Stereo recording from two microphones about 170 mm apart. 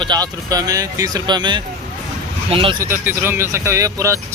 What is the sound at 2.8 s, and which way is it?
Speech, 15° right (ahead or behind).